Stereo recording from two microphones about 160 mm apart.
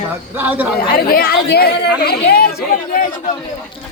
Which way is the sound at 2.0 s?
75° left (ahead or behind).